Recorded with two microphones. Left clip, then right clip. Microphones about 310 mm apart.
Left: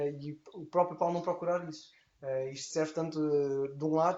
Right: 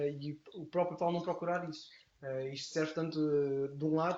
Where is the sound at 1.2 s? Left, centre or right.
Centre.